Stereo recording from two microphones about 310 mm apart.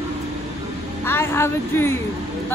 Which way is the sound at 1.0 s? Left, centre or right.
Centre.